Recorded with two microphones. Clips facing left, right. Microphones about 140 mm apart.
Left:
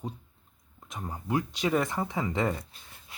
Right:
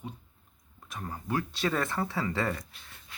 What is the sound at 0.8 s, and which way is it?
Speech, 20° left (ahead or behind).